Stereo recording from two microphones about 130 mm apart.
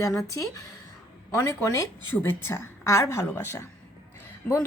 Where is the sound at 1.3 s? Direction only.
20° left (ahead or behind).